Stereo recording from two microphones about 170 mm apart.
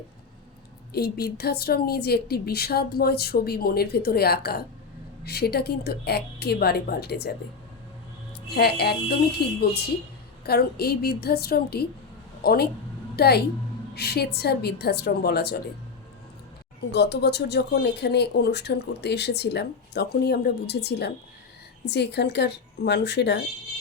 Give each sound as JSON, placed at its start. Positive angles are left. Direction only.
{"t": 0.9, "sound": "a woman's voice", "side_deg": 70}
{"t": 8.5, "sound": "a woman's voice", "side_deg": 70}
{"t": 16.9, "sound": "speech", "side_deg": 80}